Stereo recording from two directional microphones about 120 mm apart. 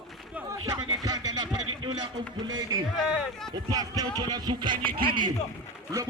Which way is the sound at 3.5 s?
30° right (ahead or behind).